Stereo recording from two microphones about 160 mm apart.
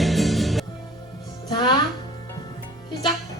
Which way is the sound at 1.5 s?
30° left (ahead or behind).